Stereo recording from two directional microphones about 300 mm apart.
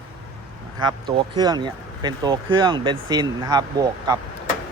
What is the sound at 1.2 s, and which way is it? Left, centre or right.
Speech, centre.